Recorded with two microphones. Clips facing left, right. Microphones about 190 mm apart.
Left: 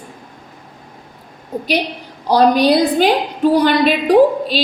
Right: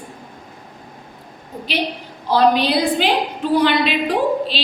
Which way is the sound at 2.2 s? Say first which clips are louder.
Left 4 dB; 40° left (ahead or behind).